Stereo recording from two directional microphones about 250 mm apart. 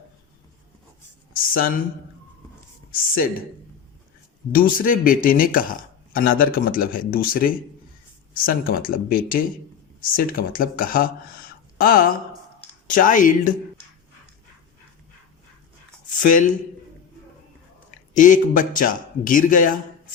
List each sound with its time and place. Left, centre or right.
1.3 s speech: left
4.5 s speech: left
16.2 s speech: left
18.1 s speech: left